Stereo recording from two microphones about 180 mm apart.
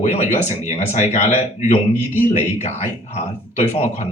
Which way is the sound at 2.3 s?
40° left (ahead or behind).